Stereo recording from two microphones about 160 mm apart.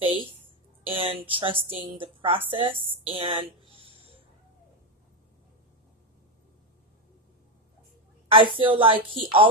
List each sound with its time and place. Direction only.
0.9 s speech: 35° right (ahead or behind)
8.3 s speech: 35° right (ahead or behind)